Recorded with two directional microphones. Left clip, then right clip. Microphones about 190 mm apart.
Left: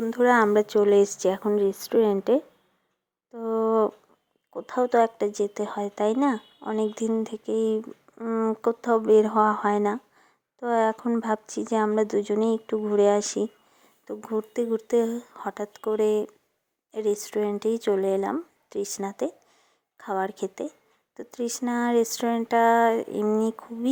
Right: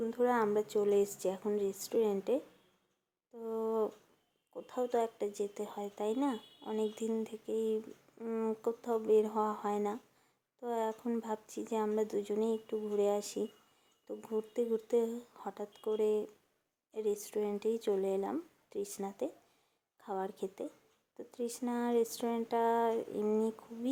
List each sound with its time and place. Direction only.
0.0 s speech: 30° left (ahead or behind)
3.3 s a sound: 30° left (ahead or behind)
4.5 s speech: 25° left (ahead or behind)